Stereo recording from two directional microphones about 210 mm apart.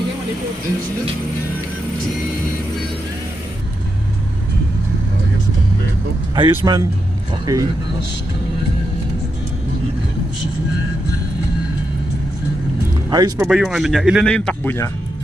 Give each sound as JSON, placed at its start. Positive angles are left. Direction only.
{"t": 6.3, "sound": "speech", "side_deg": -20}
{"t": 13.1, "sound": "speech", "side_deg": -20}
{"t": 13.5, "sound": "speech", "side_deg": 0}